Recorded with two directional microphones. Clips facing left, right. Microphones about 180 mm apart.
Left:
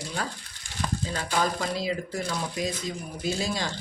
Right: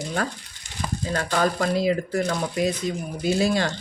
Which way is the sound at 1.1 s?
55° right (ahead or behind).